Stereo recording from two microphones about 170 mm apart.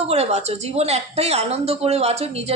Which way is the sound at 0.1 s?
40° right (ahead or behind).